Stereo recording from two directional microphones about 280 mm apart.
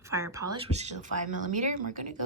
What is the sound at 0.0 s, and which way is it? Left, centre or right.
Speech, centre.